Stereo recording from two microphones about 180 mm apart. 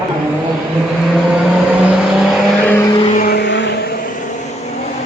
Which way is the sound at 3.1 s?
60° left (ahead or behind).